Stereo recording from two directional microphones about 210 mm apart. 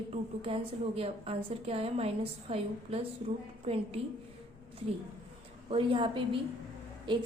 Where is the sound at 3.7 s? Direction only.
30° right (ahead or behind).